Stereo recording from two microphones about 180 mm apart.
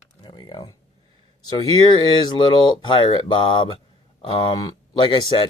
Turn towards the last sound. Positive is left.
turn(degrees=25)  # may be behind; listen again after turning